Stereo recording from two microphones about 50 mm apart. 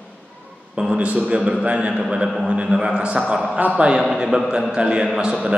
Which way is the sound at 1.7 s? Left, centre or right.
Right.